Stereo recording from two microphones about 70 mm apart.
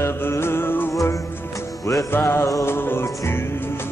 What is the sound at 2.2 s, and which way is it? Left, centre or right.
Music, left.